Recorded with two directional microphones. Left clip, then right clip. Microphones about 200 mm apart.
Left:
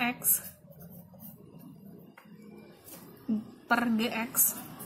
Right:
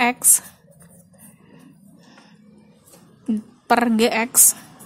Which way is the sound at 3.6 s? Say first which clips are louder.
Right 11 dB; 50° right (ahead or behind).